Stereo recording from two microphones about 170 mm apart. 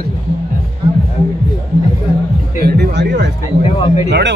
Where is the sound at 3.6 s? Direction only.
30° left (ahead or behind).